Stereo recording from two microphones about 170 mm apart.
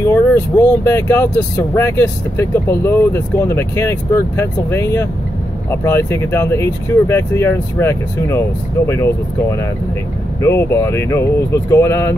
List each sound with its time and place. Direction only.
0.0 s speech: 15° left (ahead or behind)